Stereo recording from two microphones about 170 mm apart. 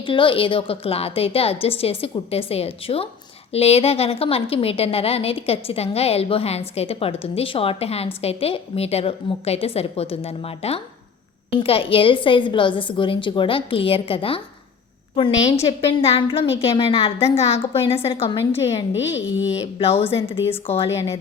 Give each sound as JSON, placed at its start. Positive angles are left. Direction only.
{"t": 0.0, "sound": "a woman's voice", "side_deg": 30}
{"t": 15.6, "sound": "a woman's voice", "side_deg": 30}